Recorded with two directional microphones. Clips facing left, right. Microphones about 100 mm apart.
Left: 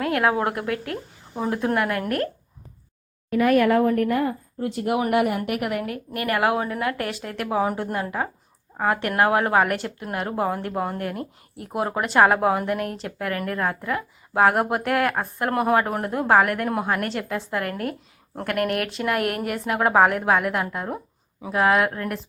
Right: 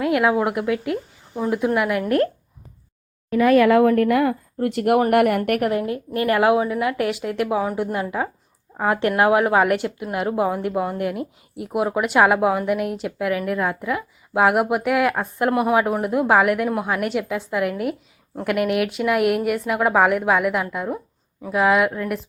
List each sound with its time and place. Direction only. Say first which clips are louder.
0.0 s a woman's voice: right 3 dB; 10° right (ahead or behind)
2.0 s a woman's voice: right 6 dB; 25° right (ahead or behind)
3.8 s speech: right 4 dB; 90° right; by 4.9 s 65° right (ahead or behind)
4.9 s speech: right 4 dB; 55° right (ahead or behind)
5.4 s a woman's voice: right 6 dB; 45° right (ahead or behind)
5.7 s a woman's voice: right 5 dB; 25° right (ahead or behind)
6.6 s a woman's voice: right 4 dB; 10° right (ahead or behind)
7.5 s a woman's voice: left 3 dB; centre (ahead or behind)
8.8 s a woman's voice: right 3 dB; 20° right (ahead or behind)
16.6 s a woman's voice: right 2 dB; centre (ahead or behind)